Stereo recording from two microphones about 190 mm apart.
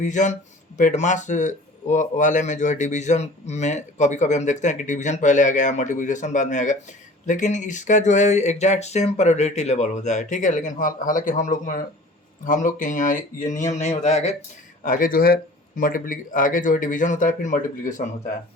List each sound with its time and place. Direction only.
0.0 s a man's voice: 40° left (ahead or behind)
14.8 s speech: 45° left (ahead or behind)